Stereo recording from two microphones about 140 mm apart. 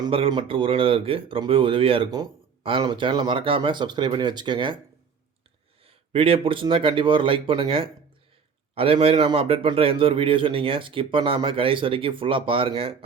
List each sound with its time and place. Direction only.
0.0 s a man's voice: 35° right (ahead or behind)
5.8 s a man's voice: 40° right (ahead or behind)